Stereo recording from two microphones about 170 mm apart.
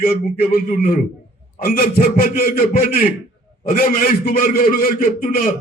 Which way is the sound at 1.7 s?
60° left (ahead or behind).